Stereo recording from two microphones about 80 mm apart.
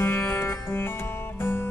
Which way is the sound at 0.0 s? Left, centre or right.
Left.